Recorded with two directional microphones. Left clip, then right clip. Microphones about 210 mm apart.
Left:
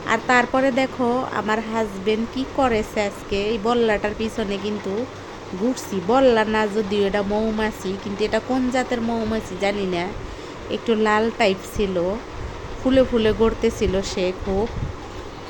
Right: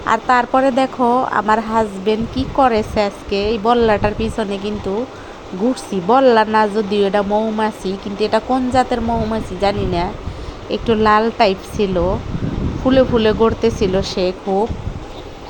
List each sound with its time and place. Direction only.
0.0 s speech: 10° right (ahead or behind)
5.9 s speech: 10° right (ahead or behind)